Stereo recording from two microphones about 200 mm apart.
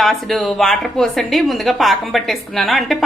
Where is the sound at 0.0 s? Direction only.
Centre (ahead or behind).